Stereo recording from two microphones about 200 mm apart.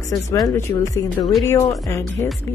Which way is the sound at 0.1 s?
20° left (ahead or behind).